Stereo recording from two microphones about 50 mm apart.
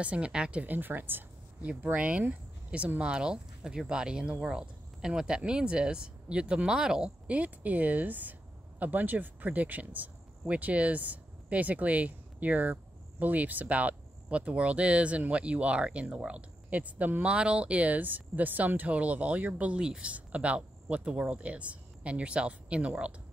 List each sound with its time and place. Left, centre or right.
0.0 s speech: right
0.7 s speech: right
2.0 s speech: right
7.2 s speech: right
17.3 s speech: right
19.8 s speech: centre
20.1 s speech: right